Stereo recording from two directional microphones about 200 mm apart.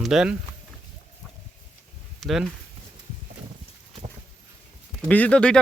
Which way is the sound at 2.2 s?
Centre (ahead or behind).